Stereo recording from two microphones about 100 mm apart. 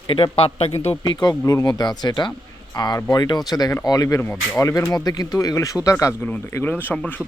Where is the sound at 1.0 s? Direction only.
40° left (ahead or behind).